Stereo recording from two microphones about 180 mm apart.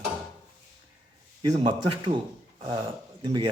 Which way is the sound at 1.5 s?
30° right (ahead or behind).